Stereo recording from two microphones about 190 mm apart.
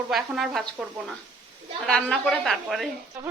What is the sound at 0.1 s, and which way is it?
Speech, centre (ahead or behind).